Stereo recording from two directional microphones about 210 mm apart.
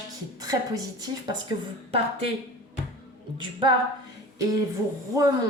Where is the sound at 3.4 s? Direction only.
25° right (ahead or behind).